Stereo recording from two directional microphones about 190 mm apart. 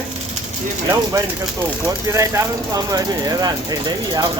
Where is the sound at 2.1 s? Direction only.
15° right (ahead or behind).